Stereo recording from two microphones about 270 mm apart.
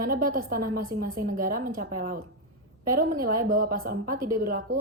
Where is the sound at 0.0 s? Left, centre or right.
Right.